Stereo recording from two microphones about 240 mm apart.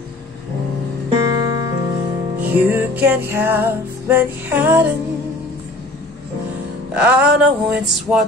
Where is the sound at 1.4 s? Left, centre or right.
Centre.